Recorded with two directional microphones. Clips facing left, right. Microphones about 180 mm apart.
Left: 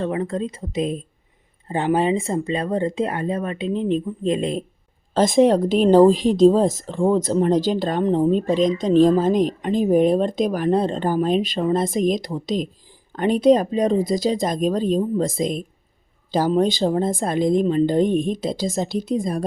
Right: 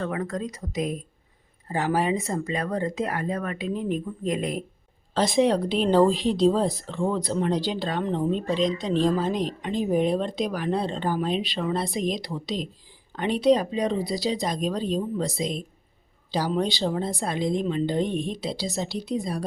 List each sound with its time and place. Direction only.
0.0 s speech: 25° left (ahead or behind)
5.1 s a woman's voice: 45° left (ahead or behind)